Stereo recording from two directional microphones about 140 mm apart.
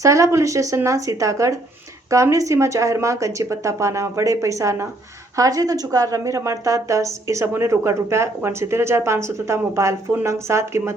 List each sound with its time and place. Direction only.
0.0 s a woman's voice: 20° right (ahead or behind)